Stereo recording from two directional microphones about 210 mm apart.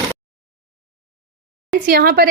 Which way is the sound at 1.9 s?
50° right (ahead or behind).